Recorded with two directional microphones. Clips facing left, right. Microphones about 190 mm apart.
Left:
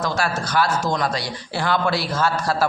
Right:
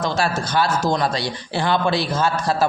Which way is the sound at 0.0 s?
25° right (ahead or behind).